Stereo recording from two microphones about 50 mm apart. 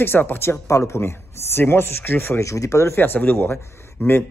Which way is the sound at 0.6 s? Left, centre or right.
Left.